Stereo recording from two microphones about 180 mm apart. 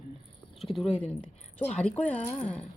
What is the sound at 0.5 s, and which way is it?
Speech, centre (ahead or behind).